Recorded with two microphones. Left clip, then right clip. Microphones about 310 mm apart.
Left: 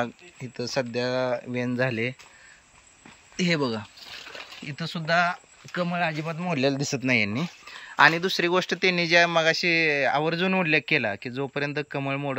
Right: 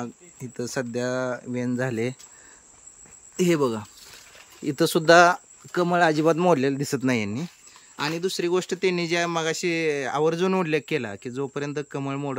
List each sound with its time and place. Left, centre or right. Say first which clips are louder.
0.0 s speech: left 6 dB; centre
3.3 s speech: right 3 dB; centre
4.6 s speech: right 10 dB; right
6.6 s speech: even; centre